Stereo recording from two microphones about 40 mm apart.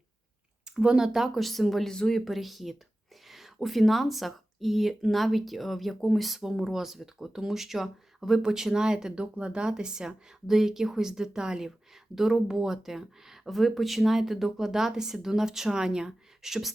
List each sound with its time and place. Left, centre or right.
0.6 s speech: right; by 1.9 s centre
1.9 s speech: centre
2.2 s speech: centre
9.2 s speech: right
9.5 s speech: right
12.1 s speech: centre